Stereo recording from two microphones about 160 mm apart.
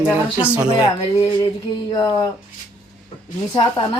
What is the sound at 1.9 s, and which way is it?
Speech, 25° left (ahead or behind).